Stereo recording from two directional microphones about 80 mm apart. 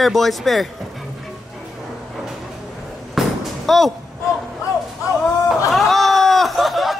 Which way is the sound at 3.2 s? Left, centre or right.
Centre.